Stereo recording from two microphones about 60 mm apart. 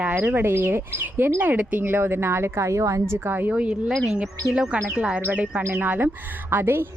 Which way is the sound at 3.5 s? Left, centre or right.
Centre.